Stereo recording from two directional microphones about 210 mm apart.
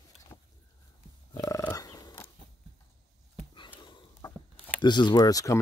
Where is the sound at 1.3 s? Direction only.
15° left (ahead or behind).